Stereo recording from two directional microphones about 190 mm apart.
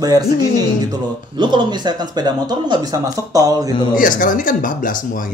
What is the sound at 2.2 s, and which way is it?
Speech, 20° right (ahead or behind).